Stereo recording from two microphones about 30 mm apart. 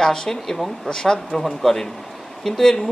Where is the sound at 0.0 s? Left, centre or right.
Centre.